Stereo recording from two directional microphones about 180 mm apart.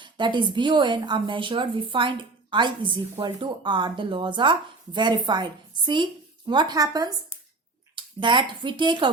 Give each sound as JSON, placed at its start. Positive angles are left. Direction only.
{"t": 0.0, "sound": "a woman's voice", "side_deg": -25}